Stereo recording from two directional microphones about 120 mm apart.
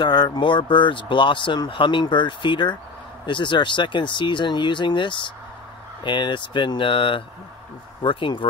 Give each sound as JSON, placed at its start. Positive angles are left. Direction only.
{"t": 0.0, "sound": "speech", "side_deg": 40}